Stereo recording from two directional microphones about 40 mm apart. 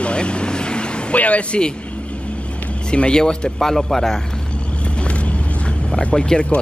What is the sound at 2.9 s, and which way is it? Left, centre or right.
Speech, left.